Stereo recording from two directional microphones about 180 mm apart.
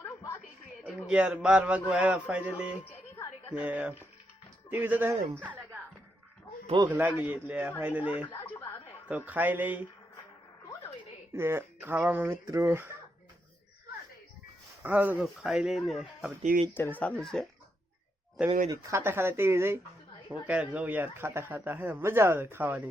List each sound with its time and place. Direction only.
0.9 s speech: centre (ahead or behind)
6.8 s speech: 15° right (ahead or behind)
11.3 s speech: 15° right (ahead or behind)
14.8 s speech: 10° right (ahead or behind)
16.4 s speech: 45° right (ahead or behind)
16.7 s speech: 10° left (ahead or behind)
18.7 s speech: 15° right (ahead or behind)